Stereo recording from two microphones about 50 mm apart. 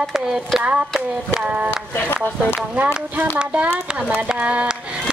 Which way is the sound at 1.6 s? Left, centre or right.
Left.